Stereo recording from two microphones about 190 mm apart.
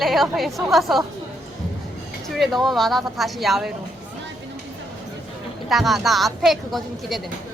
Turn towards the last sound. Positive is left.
turn(degrees=0)  # may be behind; listen again after turning